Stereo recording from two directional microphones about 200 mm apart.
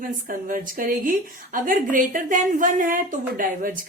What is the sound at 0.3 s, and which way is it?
A woman's voice, 45° right (ahead or behind).